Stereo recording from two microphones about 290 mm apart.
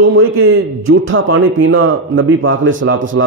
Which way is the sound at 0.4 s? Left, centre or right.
Right.